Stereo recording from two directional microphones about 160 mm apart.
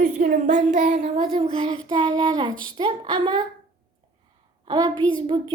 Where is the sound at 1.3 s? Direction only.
35° right (ahead or behind).